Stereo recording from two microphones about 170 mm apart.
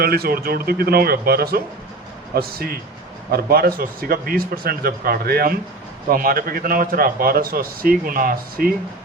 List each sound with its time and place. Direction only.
0.0 s a man's voice: 65° right (ahead or behind)